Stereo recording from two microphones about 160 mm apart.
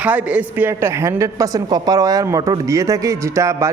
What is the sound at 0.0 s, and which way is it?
A woman's voice, 10° right (ahead or behind).